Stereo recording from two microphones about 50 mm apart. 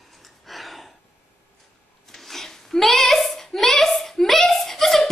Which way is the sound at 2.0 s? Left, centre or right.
Centre.